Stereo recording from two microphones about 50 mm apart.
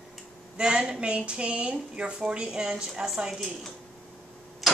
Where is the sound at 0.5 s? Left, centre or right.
Centre.